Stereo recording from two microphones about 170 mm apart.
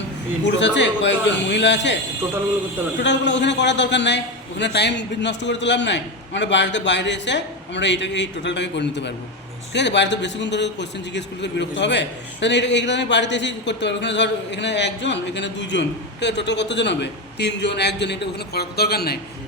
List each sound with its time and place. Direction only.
0.4 s a man's voice: 90° left
3.0 s a man's voice: 90° left; by 19.2 s 65° left (ahead or behind)